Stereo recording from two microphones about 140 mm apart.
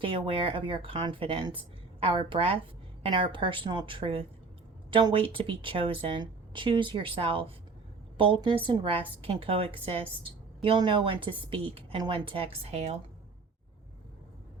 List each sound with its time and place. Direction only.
0.0 s a woman's voice: 40° right (ahead or behind)